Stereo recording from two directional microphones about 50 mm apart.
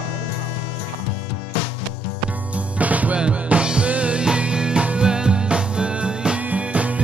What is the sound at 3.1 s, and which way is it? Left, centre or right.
Music, centre.